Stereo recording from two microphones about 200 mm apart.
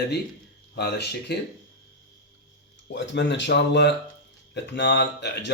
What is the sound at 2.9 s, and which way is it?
Speech, 65° left (ahead or behind).